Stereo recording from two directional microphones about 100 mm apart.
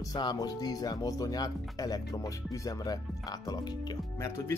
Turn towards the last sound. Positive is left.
turn(degrees=25)  # may be behind; listen again after turning